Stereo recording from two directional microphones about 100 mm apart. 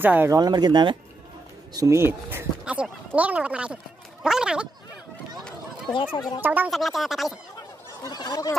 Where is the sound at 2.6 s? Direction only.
10° right (ahead or behind).